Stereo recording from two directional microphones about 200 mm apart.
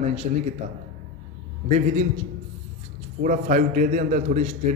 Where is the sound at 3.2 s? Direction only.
40° right (ahead or behind).